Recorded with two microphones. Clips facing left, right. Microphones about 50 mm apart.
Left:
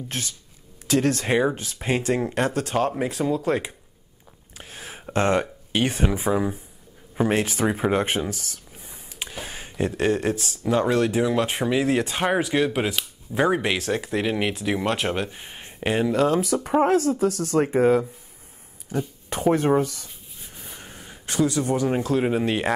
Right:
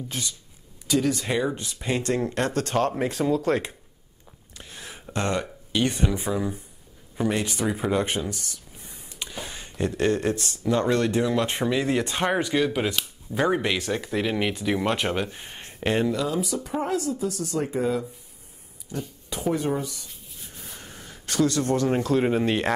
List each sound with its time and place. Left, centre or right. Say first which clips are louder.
0.8 s speech: left 2 dB; left
1.2 s speech: left 4 dB; left
2.0 s speech: left 2 dB; centre
4.6 s a sound: left 2 dB; left
6.0 s speech: left 3 dB; left
8.8 s a sound: left 2 dB; centre
9.7 s speech: left 1 dB; centre
16.2 s speech: left 6 dB; left
17.6 s speech: left 8 dB; left
18.9 s speech: left 6 dB; centre
19.2 s speech: left 5 dB; left
20.5 s speech: left 1 dB; centre